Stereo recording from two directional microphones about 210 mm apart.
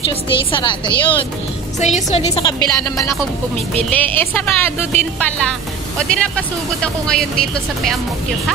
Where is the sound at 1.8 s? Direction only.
35° left (ahead or behind).